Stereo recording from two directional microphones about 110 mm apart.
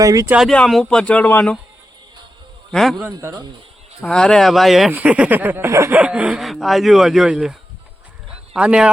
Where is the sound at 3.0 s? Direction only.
20° right (ahead or behind).